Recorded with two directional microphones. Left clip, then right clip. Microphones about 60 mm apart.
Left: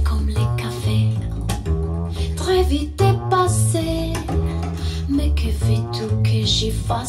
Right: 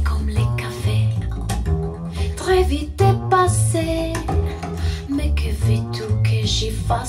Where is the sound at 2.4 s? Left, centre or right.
Left.